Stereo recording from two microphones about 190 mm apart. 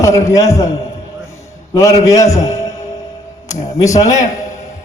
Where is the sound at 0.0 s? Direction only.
15° left (ahead or behind).